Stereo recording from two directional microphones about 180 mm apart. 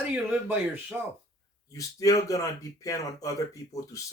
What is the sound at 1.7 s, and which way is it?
Speech, 20° left (ahead or behind).